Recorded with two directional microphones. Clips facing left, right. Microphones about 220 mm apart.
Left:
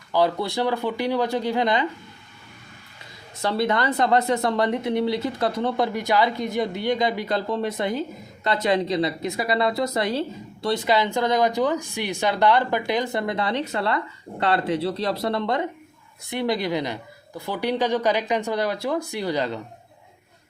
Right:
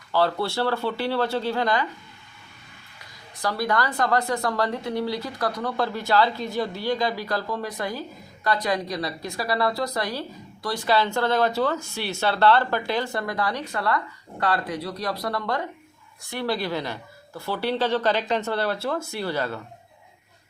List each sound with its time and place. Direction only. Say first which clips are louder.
0.1 s a woman's voice: left 1 dB; 15° left (ahead or behind)
3.3 s a woman's voice: left 2 dB; 25° left (ahead or behind)